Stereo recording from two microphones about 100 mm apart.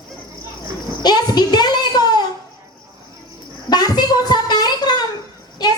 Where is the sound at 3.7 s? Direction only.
45° left (ahead or behind).